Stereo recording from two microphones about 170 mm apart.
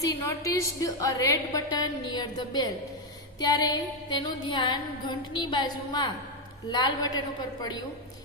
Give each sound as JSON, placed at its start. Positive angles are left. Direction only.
{"t": 0.0, "sound": "a woman's voice", "side_deg": 20}